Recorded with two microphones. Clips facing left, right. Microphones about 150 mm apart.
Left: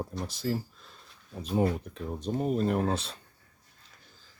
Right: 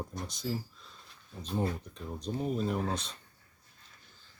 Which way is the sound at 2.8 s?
30° left (ahead or behind).